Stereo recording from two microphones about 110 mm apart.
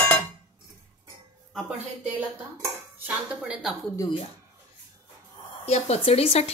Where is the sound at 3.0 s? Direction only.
5° right (ahead or behind).